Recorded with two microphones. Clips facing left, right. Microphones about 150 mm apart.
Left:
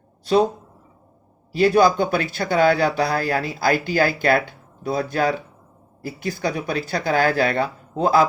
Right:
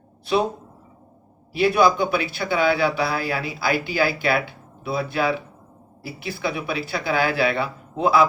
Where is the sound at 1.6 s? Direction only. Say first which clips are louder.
Left 2 dB; 40° left (ahead or behind).